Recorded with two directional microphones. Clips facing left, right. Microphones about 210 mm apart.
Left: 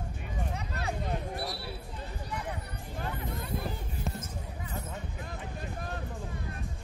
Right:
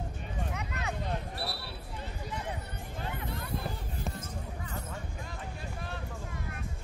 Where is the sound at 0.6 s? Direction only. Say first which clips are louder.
Left 1 dB; 35° left (ahead or behind).